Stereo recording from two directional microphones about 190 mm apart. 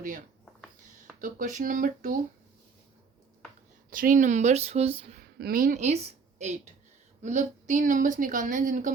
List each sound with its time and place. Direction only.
1.2 s a woman's voice: 45° right (ahead or behind)
3.8 s speech: 45° right (ahead or behind); by 5.2 s 30° right (ahead or behind)
5.4 s a woman's voice: 50° right (ahead or behind)
7.2 s a woman's voice: 40° right (ahead or behind)